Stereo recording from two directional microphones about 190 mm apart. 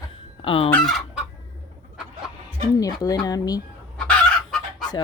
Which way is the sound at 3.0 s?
20° left (ahead or behind).